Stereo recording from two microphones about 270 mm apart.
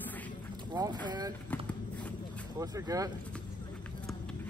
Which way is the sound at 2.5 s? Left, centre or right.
Centre.